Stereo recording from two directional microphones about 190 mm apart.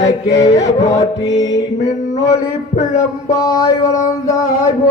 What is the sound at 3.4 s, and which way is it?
Music, 15° left (ahead or behind).